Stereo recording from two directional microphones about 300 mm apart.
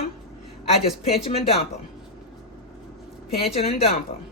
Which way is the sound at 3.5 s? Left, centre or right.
Centre.